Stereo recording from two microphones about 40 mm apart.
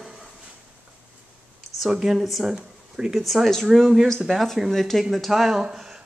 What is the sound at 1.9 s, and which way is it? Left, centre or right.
Speech, centre.